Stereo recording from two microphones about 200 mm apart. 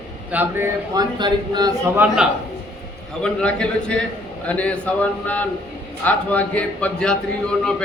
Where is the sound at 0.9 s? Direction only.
20° right (ahead or behind).